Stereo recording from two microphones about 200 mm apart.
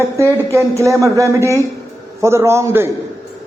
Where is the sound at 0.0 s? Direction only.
15° right (ahead or behind).